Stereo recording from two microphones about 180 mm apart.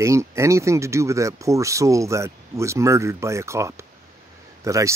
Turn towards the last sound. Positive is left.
turn(degrees=-15)  # may be behind; listen again after turning